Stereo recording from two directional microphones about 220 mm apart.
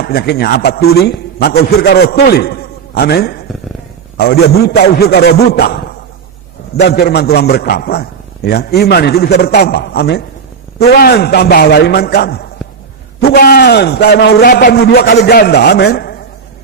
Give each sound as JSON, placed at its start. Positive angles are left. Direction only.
{"t": 0.0, "sound": "a man's voice", "side_deg": 45}
{"t": 6.8, "sound": "a man's voice", "side_deg": 45}